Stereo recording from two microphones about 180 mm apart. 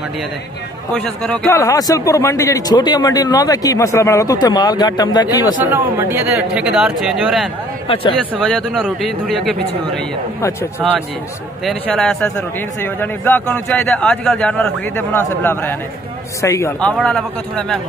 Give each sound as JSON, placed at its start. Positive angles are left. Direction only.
{"t": 0.9, "sound": "speech", "side_deg": 5}
{"t": 1.5, "sound": "a man's voice", "side_deg": 20}
{"t": 5.7, "sound": "speech", "side_deg": -10}
{"t": 7.9, "sound": "a man's voice", "side_deg": 30}
{"t": 8.4, "sound": "speech", "side_deg": 0}
{"t": 10.8, "sound": "a man's voice", "side_deg": 0}
{"t": 17.0, "sound": "speech", "side_deg": 5}